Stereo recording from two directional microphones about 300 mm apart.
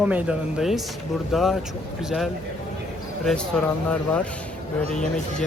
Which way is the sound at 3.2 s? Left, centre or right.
Centre.